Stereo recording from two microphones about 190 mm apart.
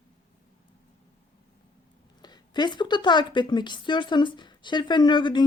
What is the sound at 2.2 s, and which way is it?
A woman's voice, 20° left (ahead or behind).